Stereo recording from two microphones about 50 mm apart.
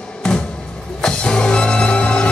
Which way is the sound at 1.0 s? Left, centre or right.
Centre.